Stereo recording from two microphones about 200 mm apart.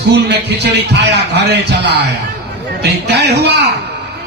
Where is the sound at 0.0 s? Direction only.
55° right (ahead or behind).